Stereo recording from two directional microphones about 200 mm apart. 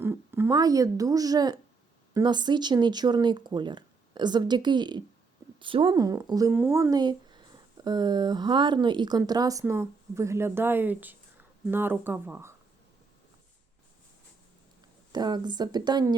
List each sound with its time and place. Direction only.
0.0 s speech: 10° right (ahead or behind)
15.1 s speech: 20° right (ahead or behind)